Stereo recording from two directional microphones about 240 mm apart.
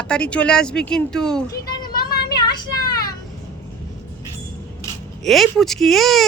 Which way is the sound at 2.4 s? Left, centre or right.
Centre.